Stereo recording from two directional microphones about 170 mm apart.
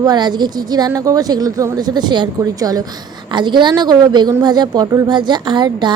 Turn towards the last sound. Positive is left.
turn(degrees=-25)  # may be behind; listen again after turning